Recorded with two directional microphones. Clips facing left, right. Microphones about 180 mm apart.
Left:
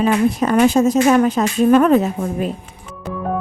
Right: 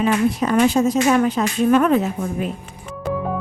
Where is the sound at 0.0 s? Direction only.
45° left (ahead or behind).